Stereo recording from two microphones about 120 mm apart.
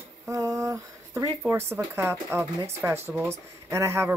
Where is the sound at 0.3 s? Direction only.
30° right (ahead or behind).